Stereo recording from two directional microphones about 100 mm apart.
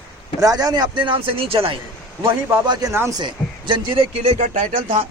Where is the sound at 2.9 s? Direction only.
25° right (ahead or behind).